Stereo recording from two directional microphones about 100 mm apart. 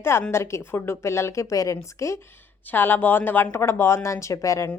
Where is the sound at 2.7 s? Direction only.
20° left (ahead or behind).